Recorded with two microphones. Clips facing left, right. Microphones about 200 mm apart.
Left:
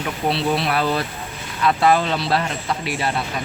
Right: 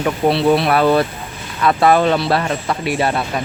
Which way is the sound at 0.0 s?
65° right (ahead or behind).